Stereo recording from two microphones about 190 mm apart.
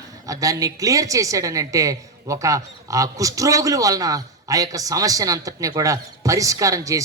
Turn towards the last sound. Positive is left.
turn(degrees=-15)  # may be behind; listen again after turning